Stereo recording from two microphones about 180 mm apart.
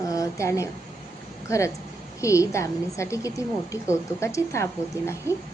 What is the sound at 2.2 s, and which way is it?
A woman's voice, 15° left (ahead or behind).